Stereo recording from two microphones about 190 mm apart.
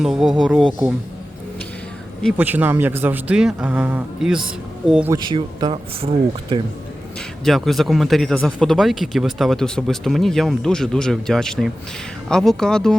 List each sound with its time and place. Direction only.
0.0 s speech: centre (ahead or behind)
2.4 s a man's voice: 10° right (ahead or behind)
5.1 s speech: 20° right (ahead or behind)
7.4 s speech: centre (ahead or behind)